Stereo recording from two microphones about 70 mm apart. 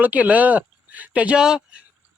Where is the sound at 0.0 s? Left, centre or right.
Right.